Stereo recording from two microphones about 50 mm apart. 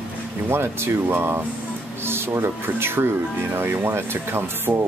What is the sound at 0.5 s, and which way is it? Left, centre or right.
Speech, right.